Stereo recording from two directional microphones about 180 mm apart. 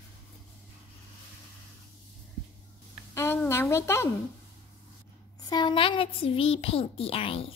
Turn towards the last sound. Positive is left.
turn(degrees=30)  # may be behind; listen again after turning